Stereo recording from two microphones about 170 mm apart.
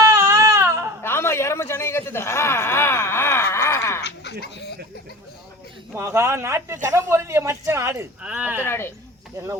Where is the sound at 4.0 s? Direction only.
90° left.